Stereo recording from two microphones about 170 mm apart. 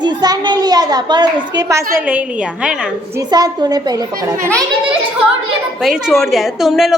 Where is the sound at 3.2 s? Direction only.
25° right (ahead or behind).